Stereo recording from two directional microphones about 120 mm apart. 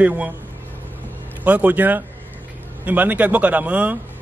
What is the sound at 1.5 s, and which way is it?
Speech, 15° right (ahead or behind).